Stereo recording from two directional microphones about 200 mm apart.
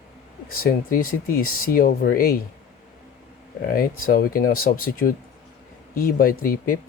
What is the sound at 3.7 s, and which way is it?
Speech, 45° left (ahead or behind).